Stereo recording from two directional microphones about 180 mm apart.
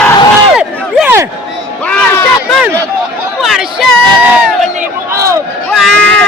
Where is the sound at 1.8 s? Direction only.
10° left (ahead or behind).